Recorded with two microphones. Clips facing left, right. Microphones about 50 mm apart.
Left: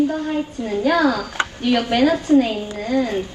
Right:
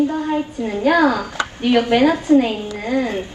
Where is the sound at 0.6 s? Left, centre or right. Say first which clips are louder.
Right 2 dB; centre.